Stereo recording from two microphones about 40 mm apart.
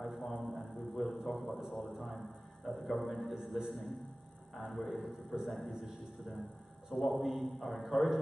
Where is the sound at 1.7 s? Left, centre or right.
Centre.